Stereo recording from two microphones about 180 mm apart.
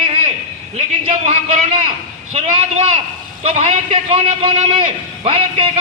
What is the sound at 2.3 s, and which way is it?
A woman's voice, 35° right (ahead or behind).